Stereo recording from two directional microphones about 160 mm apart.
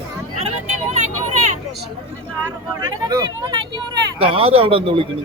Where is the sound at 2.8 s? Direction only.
25° right (ahead or behind).